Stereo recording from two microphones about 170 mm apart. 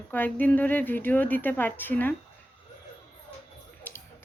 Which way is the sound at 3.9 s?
10° left (ahead or behind).